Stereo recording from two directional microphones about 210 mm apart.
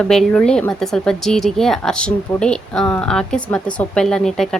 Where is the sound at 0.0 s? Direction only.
5° left (ahead or behind).